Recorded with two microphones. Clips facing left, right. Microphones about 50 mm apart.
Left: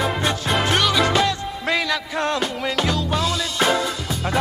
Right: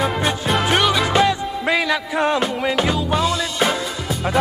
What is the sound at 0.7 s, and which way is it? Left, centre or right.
Music, centre.